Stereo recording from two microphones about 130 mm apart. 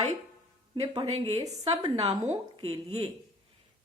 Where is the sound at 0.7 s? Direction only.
40° right (ahead or behind).